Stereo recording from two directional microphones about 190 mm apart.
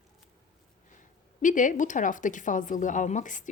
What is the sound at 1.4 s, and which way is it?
Speech, 45° left (ahead or behind).